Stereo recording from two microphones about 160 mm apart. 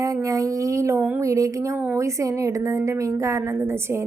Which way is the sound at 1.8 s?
15° right (ahead or behind).